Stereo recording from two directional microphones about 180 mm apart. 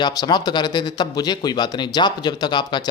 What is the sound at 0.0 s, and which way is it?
A man's voice, 20° left (ahead or behind).